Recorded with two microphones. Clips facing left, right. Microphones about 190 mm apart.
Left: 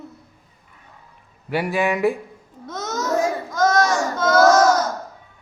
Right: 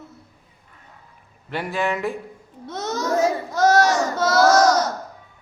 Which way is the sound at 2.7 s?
30° right (ahead or behind).